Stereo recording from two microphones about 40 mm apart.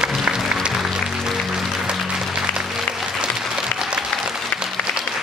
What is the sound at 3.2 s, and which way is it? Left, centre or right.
Applause, right.